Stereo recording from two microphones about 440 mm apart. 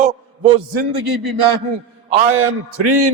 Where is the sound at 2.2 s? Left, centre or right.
Right.